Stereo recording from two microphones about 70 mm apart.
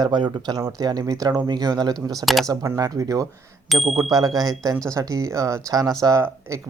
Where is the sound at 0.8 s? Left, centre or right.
Right.